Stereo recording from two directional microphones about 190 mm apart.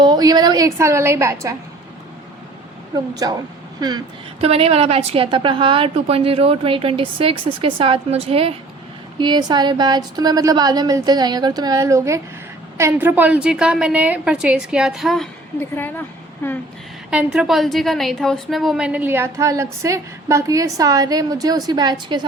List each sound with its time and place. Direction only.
0.0 s a woman's voice: 20° right (ahead or behind)
2.9 s a woman's voice: 20° right (ahead or behind); by 15.3 s centre (ahead or behind)
15.7 s a woman's voice: 10° left (ahead or behind)
17.1 s a woman's voice: 5° right (ahead or behind); by 22.2 s 20° right (ahead or behind)